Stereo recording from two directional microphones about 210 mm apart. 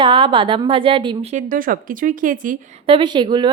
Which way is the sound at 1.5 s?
40° right (ahead or behind).